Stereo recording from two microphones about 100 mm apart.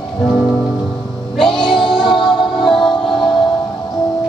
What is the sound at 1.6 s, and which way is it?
Music, 55° left (ahead or behind).